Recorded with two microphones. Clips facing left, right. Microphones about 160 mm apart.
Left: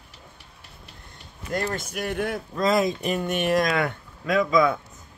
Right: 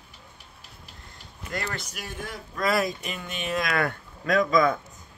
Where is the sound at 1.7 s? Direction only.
55° left (ahead or behind).